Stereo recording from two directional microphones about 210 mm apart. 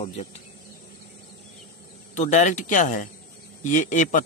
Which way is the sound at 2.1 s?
35° left (ahead or behind).